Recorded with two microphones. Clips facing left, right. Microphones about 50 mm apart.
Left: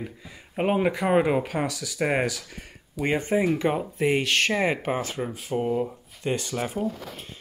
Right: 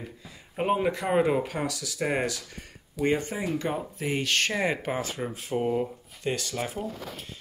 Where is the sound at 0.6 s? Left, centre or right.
Left.